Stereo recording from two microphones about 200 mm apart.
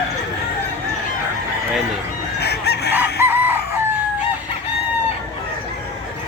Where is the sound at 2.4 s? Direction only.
55° left (ahead or behind).